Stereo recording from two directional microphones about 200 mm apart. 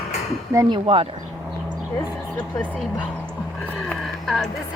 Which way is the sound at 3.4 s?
5° left (ahead or behind).